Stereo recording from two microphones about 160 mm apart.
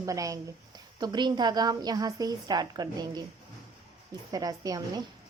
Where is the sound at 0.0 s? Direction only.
20° right (ahead or behind).